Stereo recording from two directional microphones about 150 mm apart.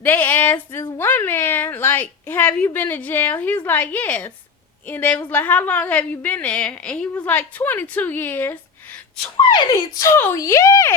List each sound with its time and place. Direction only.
0.0 s a woman's voice: 10° left (ahead or behind)
9.5 s a child's voice: 30° left (ahead or behind)